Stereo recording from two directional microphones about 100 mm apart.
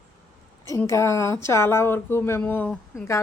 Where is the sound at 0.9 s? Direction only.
30° left (ahead or behind).